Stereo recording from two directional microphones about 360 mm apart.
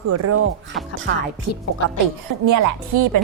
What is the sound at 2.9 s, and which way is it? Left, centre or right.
Speech, right.